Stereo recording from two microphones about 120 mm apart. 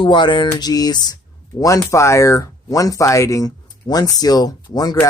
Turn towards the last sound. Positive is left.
turn(degrees=35)  # may be behind; listen again after turning